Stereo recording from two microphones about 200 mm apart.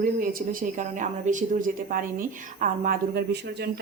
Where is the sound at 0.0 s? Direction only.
45° right (ahead or behind).